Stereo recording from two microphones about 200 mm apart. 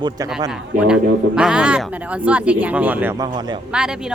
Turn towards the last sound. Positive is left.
turn(degrees=-5)  # may be behind; listen again after turning